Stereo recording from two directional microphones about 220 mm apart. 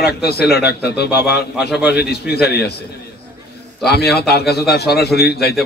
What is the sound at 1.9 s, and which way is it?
Speech, 45° left (ahead or behind).